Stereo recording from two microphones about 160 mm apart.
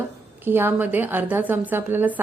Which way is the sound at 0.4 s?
15° right (ahead or behind).